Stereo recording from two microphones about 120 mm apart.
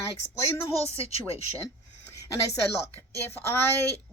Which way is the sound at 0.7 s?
55° left (ahead or behind).